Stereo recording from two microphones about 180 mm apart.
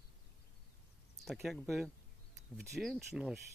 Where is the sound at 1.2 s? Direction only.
Centre (ahead or behind).